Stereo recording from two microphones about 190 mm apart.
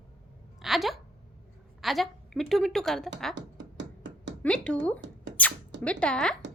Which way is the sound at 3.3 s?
70° right (ahead or behind).